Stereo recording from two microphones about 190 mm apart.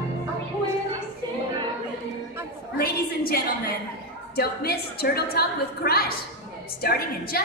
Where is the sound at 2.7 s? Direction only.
50° left (ahead or behind).